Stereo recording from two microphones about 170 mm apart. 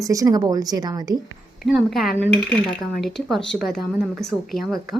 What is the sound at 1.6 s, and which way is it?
Speech, centre (ahead or behind).